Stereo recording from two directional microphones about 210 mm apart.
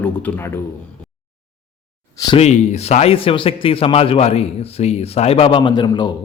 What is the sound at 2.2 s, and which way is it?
Speech, 20° left (ahead or behind).